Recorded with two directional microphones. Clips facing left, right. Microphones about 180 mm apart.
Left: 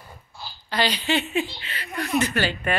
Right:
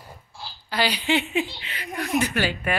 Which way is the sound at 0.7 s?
10° right (ahead or behind).